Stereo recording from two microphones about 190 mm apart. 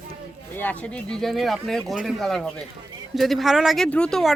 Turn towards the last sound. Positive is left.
turn(degrees=5)  # may be behind; listen again after turning